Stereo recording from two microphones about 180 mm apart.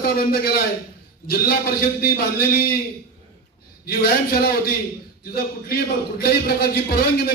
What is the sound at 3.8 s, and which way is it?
A man's voice, 55° left (ahead or behind).